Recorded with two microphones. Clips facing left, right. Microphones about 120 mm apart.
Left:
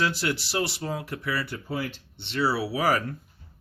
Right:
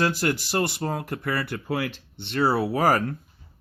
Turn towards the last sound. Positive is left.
turn(degrees=-45)  # may be behind; listen again after turning